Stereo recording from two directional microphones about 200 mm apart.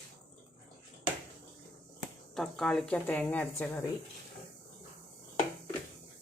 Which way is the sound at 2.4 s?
Centre (ahead or behind).